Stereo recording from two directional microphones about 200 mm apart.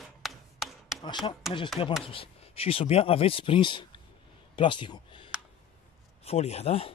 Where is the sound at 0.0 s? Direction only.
Centre (ahead or behind).